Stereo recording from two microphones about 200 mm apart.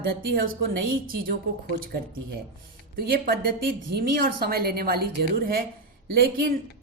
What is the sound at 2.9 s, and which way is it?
A woman's voice, 50° right (ahead or behind).